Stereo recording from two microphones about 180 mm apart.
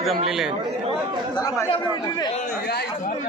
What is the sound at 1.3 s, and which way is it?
Chatter, 20° left (ahead or behind).